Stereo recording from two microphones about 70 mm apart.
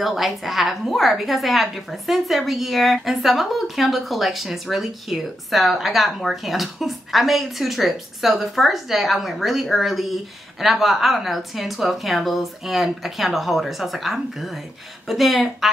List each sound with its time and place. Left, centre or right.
0.0 s a woman's voice: centre